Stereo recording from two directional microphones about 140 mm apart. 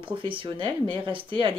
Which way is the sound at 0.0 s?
40° right (ahead or behind).